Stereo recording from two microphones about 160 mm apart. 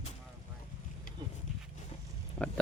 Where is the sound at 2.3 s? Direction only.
5° left (ahead or behind).